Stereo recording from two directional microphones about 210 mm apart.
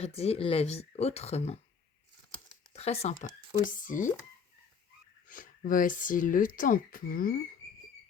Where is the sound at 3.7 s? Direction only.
40° left (ahead or behind).